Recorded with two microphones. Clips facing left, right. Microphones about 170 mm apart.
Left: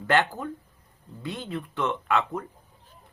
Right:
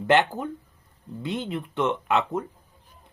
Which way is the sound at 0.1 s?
20° right (ahead or behind).